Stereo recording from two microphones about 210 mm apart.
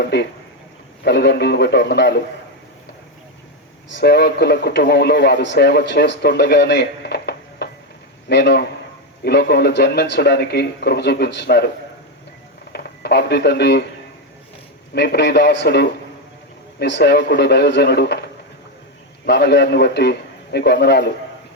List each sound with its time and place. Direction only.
0.0 s a man's voice: 55° left (ahead or behind)
3.9 s a man's voice: 55° left (ahead or behind)
12.7 s speech: 50° left (ahead or behind)
14.9 s a man's voice: 55° left (ahead or behind)
19.2 s a man's voice: 55° left (ahead or behind)